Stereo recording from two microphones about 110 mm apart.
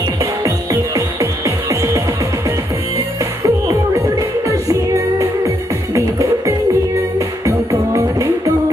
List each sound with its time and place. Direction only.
0.9 s music: 30° right (ahead or behind)
3.4 s music: 30° right (ahead or behind)
5.9 s music: 30° right (ahead or behind)